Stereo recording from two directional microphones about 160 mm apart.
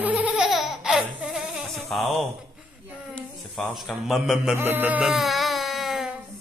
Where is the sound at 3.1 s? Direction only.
Centre (ahead or behind).